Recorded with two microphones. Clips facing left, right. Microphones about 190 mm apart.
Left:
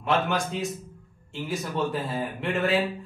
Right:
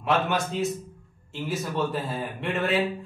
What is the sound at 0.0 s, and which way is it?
Speech, centre (ahead or behind).